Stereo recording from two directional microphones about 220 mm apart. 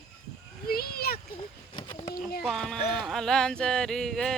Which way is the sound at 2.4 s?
Centre (ahead or behind).